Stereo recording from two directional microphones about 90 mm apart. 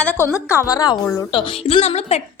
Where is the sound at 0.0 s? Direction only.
15° left (ahead or behind).